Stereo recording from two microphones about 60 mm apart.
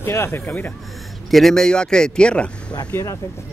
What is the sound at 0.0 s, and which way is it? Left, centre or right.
Speech, left.